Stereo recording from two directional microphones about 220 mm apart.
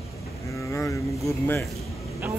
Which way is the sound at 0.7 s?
10° left (ahead or behind).